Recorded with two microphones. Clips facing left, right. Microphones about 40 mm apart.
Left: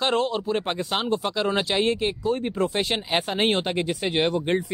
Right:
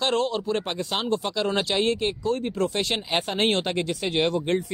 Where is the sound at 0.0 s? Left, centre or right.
Centre.